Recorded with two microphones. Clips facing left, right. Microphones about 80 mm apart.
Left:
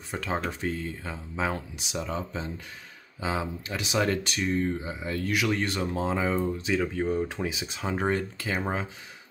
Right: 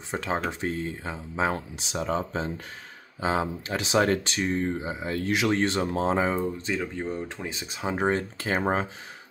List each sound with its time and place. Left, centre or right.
0.1 s speech: right
1.5 s speech: right
6.4 s speech: centre
7.1 s speech: centre
7.6 s speech: centre
7.9 s speech: right